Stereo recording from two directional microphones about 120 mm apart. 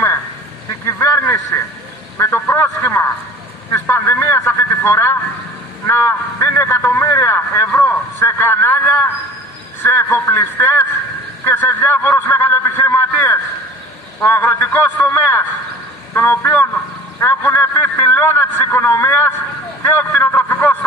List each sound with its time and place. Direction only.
0.8 s a sound: 25° left (ahead or behind)
2.1 s a man's voice: 25° left (ahead or behind)
17.2 s vehicle: 20° left (ahead or behind)
18.1 s speech: 20° left (ahead or behind)
19.8 s vehicle: 20° left (ahead or behind)
20.2 s a sound: 20° left (ahead or behind)